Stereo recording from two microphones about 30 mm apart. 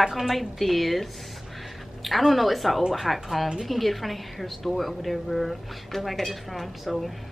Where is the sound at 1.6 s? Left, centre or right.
Centre.